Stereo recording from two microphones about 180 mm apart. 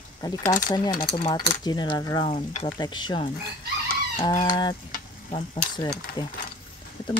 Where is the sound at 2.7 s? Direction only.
25° left (ahead or behind).